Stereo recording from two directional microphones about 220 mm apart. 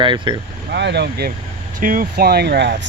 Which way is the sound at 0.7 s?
50° right (ahead or behind).